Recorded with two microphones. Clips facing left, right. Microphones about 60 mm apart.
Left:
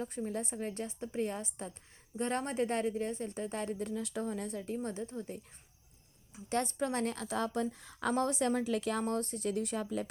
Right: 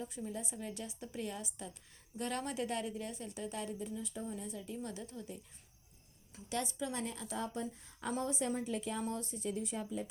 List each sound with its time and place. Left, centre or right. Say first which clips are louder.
0.0 s a woman's voice: left 5 dB; left
6.5 s speech: left 6 dB; left
8.1 s speech: left 5 dB; left